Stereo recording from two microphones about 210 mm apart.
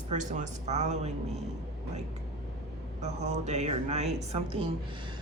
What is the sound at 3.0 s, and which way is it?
Speech, 30° right (ahead or behind).